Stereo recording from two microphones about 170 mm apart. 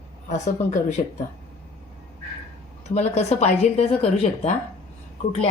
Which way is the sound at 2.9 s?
40° left (ahead or behind).